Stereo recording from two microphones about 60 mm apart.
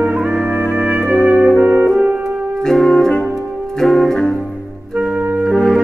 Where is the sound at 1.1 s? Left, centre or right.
Centre.